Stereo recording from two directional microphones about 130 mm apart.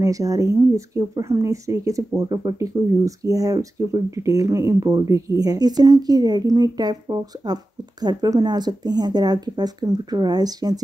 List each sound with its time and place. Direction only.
0.0 s speech: 25° right (ahead or behind)